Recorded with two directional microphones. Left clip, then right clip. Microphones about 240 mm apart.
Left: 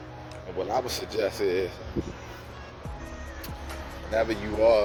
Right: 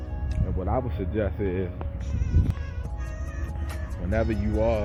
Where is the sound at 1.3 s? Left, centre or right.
Centre.